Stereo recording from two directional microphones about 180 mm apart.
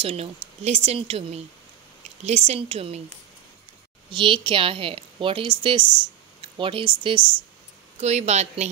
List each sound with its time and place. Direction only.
0.0 s speech: 35° right (ahead or behind)
4.1 s a woman's voice: 30° right (ahead or behind)